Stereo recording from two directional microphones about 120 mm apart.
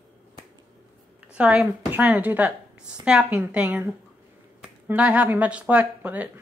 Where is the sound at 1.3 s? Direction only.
10° right (ahead or behind).